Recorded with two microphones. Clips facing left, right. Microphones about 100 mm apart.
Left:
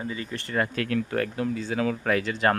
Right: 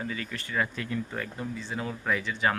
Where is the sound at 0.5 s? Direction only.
75° left (ahead or behind).